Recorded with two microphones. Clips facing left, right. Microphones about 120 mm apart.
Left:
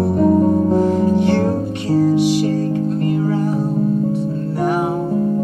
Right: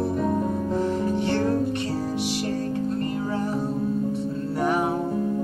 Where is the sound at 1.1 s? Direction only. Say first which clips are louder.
Left 7 dB; 90° left.